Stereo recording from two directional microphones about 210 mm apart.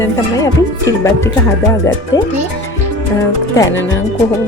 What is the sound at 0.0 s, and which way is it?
A woman's voice, 15° left (ahead or behind).